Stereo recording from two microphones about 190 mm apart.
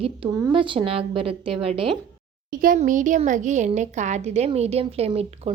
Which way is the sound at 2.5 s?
45° right (ahead or behind).